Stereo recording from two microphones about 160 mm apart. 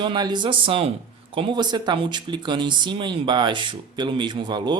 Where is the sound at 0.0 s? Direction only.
30° right (ahead or behind).